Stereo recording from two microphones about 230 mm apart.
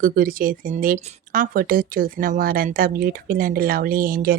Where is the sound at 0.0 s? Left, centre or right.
Right.